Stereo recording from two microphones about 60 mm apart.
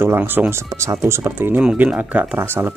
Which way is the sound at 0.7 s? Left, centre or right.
Right.